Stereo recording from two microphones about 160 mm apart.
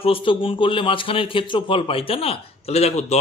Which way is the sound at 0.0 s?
35° left (ahead or behind).